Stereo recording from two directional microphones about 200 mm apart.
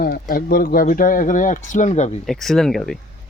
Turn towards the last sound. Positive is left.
turn(degrees=0)  # may be behind; listen again after turning